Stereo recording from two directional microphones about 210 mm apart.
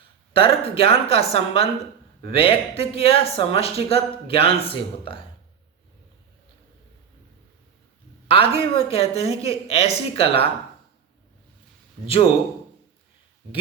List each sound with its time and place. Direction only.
0.3 s speech: 25° left (ahead or behind)
8.3 s speech: 25° left (ahead or behind)